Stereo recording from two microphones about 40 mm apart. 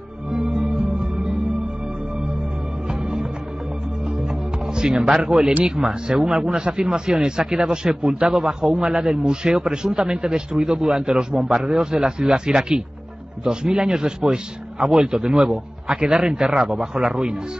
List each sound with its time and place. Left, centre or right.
0.3 s music: centre
2.9 s music: centre
5.1 s a man's voice: centre